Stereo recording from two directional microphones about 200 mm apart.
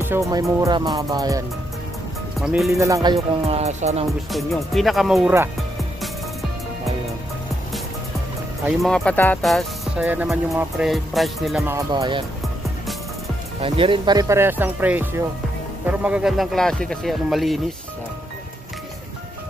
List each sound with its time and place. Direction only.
0.0 s speech: 15° right (ahead or behind)
2.4 s speech: 5° right (ahead or behind)
2.7 s music: 15° right (ahead or behind); by 4.1 s 30° right (ahead or behind)
4.3 s speech: centre (ahead or behind)
8.6 s speech: 5° left (ahead or behind)
11.6 s speech: 15° right (ahead or behind)
13.6 s speech: 25° right (ahead or behind); by 17.6 s centre (ahead or behind)